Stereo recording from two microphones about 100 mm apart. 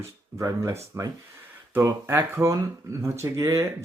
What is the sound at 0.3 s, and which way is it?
Speech, 30° right (ahead or behind).